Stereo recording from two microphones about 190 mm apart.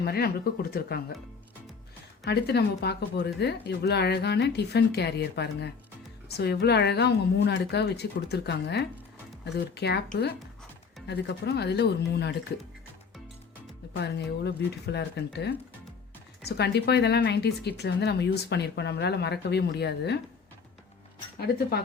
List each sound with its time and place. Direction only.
0.0 s speech: 55° left (ahead or behind)
2.2 s speech: 60° left (ahead or behind)
11.0 s speech: 60° left (ahead or behind)
14.0 s speech: 60° left (ahead or behind)
21.3 s speech: 55° left (ahead or behind)